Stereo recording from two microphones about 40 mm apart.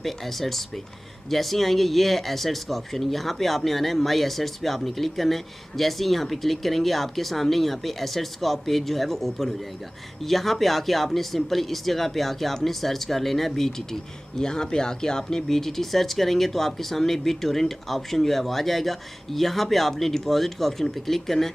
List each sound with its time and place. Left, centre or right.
0.0 s speech: centre